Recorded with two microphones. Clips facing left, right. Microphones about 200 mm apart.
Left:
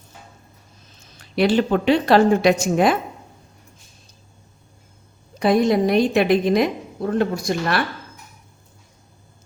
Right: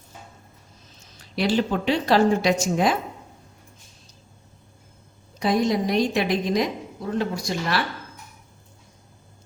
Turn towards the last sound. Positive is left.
turn(degrees=55)  # may be behind; listen again after turning